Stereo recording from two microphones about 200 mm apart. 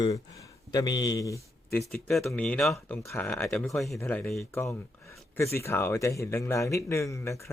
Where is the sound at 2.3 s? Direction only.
5° left (ahead or behind).